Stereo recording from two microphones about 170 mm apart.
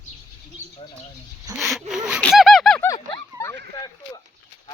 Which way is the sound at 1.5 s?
20° right (ahead or behind).